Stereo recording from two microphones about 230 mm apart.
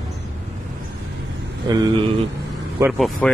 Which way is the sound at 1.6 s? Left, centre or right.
Centre.